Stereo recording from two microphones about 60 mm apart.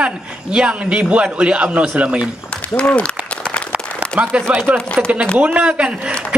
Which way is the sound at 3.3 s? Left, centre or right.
Centre.